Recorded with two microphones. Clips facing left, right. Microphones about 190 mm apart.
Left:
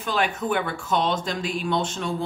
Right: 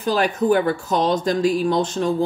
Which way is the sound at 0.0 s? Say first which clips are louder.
Right 6 dB; 35° right (ahead or behind).